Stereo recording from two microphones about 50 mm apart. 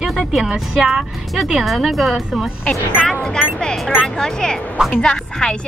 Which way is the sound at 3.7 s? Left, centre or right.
Centre.